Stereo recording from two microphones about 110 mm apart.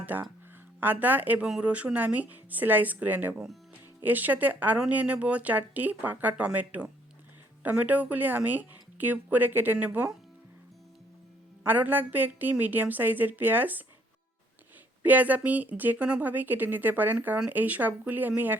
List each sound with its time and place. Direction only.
0.0 s speech: 15° right (ahead or behind)
4.0 s speech: 15° right (ahead or behind)
11.6 s speech: 15° right (ahead or behind)
15.0 s speech: 15° right (ahead or behind)